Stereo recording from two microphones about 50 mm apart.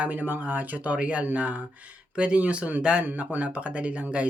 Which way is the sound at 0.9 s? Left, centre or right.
Right.